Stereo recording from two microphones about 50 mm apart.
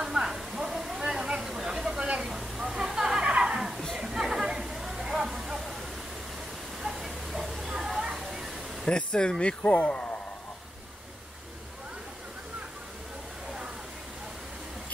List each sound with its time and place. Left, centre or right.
0.0 s a sound: centre
2.0 s vehicle: centre
2.3 s a sound: centre
3.9 s chatter: centre
6.8 s waterfall: centre
8.8 s speech: centre